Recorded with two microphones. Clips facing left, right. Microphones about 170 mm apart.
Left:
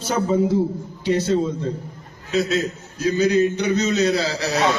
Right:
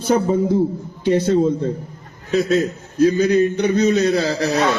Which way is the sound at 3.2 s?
55° right (ahead or behind).